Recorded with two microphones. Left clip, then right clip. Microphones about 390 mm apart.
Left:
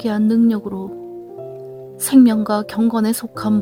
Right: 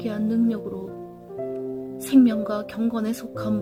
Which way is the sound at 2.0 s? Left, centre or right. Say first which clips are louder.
Left 6 dB; left.